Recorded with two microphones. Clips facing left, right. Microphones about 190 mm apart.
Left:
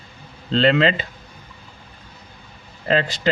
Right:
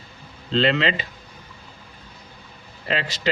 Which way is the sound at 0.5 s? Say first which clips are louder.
Left 4 dB; 45° left (ahead or behind).